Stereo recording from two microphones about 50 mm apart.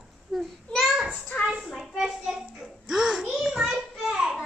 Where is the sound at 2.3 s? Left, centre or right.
Centre.